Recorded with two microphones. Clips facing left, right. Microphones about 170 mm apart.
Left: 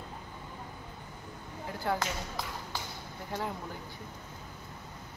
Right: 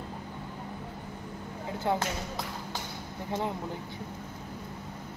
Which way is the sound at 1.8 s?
20° right (ahead or behind).